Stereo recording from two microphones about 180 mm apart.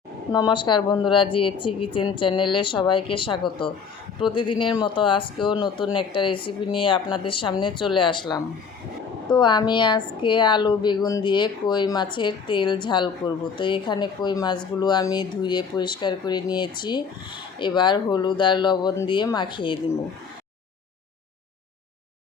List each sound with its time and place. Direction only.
0.3 s speech: 20° left (ahead or behind)